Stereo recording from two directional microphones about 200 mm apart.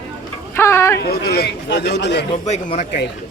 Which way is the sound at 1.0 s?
50° left (ahead or behind).